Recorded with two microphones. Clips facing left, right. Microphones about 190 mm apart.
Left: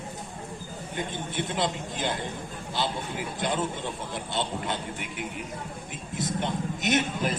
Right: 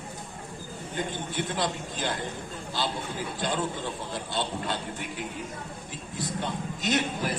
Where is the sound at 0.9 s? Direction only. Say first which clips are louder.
Even; 20° left (ahead or behind).